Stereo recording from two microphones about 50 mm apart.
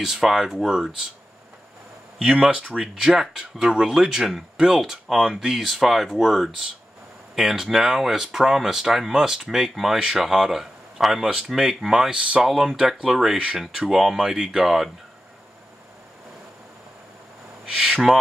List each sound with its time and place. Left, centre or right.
0.0 s speech: centre
2.2 s speech: centre
17.6 s speech: centre